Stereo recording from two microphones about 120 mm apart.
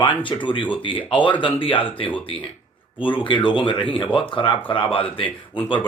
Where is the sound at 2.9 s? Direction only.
45° left (ahead or behind).